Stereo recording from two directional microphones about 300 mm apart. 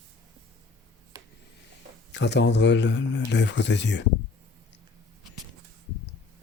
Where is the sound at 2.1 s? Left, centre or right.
Left.